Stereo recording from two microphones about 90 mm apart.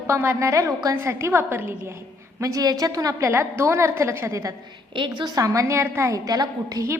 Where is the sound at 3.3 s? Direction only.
25° right (ahead or behind).